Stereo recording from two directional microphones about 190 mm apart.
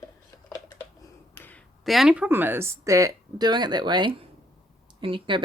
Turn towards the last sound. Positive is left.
turn(degrees=-25)  # may be behind; listen again after turning